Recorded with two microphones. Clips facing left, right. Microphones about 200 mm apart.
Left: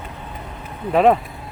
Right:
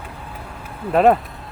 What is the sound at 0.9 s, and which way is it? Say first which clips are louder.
Speech: even; centre (ahead or behind).